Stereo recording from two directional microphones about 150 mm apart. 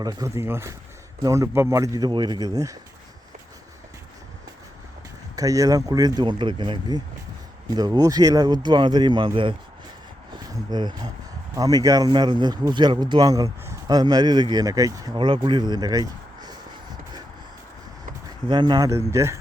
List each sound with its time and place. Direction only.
0.0 s speech: 25° right (ahead or behind)
5.4 s speech: 25° right (ahead or behind)
18.4 s speech: 30° right (ahead or behind)